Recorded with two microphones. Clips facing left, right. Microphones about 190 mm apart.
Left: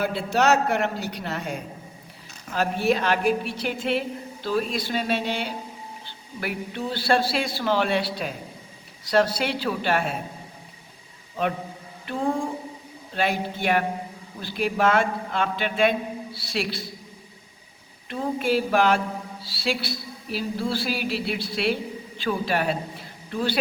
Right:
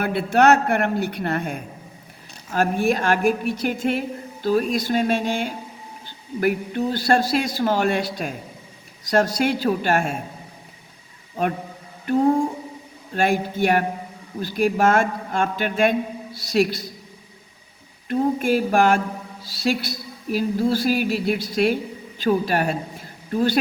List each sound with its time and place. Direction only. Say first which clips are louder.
0.0 s a man's voice: right 5 dB; 60° right (ahead or behind)
12.0 s mantra: right 8 dB; 40° right (ahead or behind)
13.1 s a woman's voice: right 5 dB; 45° right (ahead or behind)
18.1 s a woman's voice: right 4 dB; 45° right (ahead or behind)